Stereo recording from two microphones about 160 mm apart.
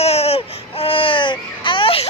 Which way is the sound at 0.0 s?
40° left (ahead or behind).